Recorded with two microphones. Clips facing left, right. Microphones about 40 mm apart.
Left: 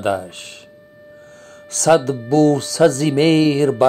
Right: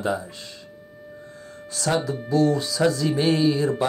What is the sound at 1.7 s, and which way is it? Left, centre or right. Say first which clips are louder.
Speech: left 10 dB; left.